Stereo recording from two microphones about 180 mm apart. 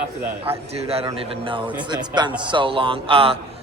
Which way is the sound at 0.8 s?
30° right (ahead or behind).